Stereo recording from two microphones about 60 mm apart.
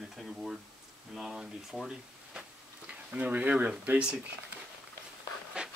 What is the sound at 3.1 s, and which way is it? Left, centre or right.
Speech, right.